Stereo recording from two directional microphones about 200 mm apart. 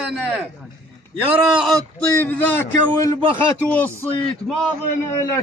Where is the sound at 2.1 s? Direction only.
10° left (ahead or behind).